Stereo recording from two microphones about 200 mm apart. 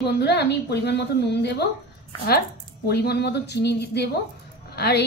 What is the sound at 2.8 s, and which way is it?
A woman's voice, 55° left (ahead or behind).